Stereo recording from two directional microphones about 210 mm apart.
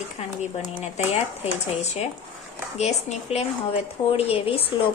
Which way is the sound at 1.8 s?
30° left (ahead or behind).